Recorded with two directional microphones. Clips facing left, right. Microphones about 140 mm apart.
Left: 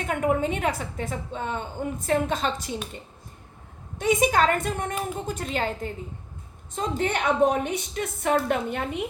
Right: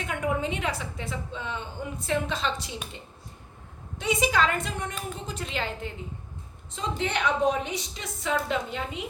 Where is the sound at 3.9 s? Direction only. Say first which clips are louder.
Left 4 dB; 45° left (ahead or behind).